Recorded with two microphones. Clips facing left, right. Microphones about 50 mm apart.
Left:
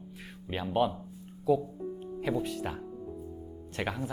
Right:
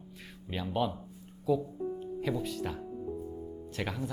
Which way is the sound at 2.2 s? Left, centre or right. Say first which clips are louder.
Left 3 dB; centre.